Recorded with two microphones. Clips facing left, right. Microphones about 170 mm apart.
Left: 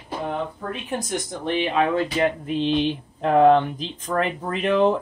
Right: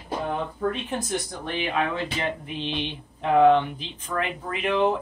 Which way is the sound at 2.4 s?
45° left (ahead or behind).